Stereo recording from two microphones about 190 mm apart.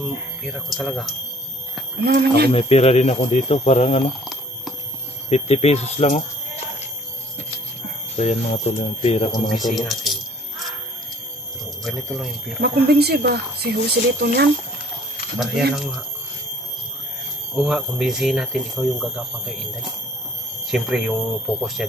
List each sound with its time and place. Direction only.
0.0 s speech: centre (ahead or behind)
2.0 s speech: 55° right (ahead or behind)
2.5 s speech: 30° left (ahead or behind)
5.3 s speech: 35° left (ahead or behind)
8.2 s speech: 35° left (ahead or behind)
9.3 s speech: centre (ahead or behind)
11.8 s speech: centre (ahead or behind)
12.5 s speech: 55° right (ahead or behind)
15.3 s speech: centre (ahead or behind)
17.6 s speech: centre (ahead or behind)